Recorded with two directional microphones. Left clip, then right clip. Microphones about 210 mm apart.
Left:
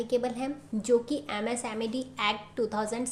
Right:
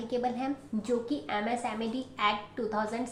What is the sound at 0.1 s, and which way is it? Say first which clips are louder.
A woman's voice: right 1 dB; 50° left (ahead or behind).